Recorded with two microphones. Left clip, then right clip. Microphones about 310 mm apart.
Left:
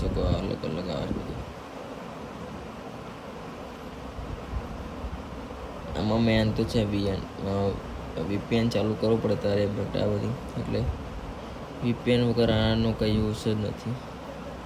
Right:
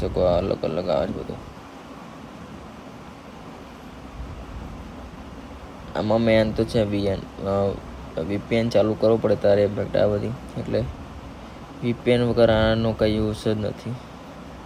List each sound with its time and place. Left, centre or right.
0.0 s speech: centre
5.9 s speech: centre
11.9 s speech: centre